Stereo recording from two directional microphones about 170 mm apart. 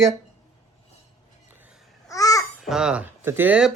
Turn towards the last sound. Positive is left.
turn(degrees=-5)  # may be behind; listen again after turning